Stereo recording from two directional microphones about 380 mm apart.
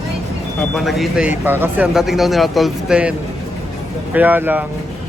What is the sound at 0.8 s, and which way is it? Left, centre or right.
Speech, centre.